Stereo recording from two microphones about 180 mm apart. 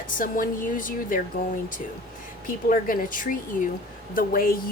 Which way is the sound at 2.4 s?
50° left (ahead or behind).